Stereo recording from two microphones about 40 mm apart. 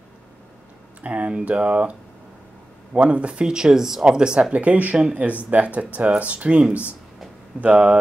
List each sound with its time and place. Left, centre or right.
1.0 s speech: right
4.5 s speech: right